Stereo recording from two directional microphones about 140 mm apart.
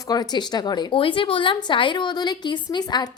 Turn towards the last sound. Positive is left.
turn(degrees=30)  # may be behind; listen again after turning